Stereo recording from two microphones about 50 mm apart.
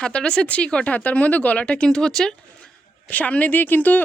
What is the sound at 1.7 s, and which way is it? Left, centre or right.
Speech, centre.